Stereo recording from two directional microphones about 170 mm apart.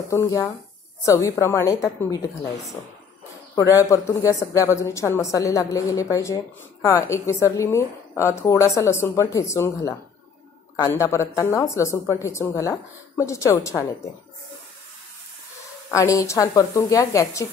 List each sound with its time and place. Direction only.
0.1 s a woman's voice: 20° left (ahead or behind)
15.9 s speech: 20° left (ahead or behind)